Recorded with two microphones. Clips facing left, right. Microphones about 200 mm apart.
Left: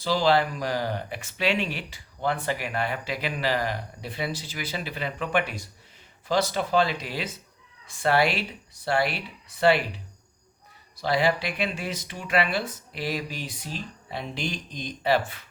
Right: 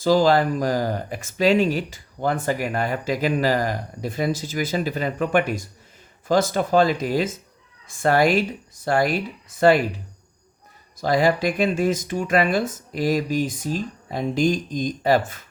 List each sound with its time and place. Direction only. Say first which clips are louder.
0.0 s speech: right 5 dB; 45° right (ahead or behind)